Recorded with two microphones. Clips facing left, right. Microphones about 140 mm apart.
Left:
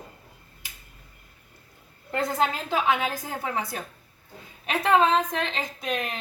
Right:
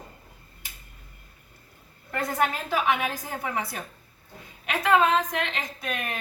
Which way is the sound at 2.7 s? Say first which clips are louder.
Left 1 dB; 20° left (ahead or behind).